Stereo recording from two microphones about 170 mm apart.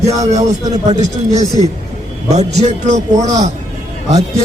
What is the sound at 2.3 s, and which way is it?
A man's voice, 40° right (ahead or behind).